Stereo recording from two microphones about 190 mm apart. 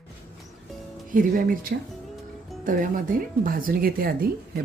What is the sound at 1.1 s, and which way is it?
Speech, 45° right (ahead or behind).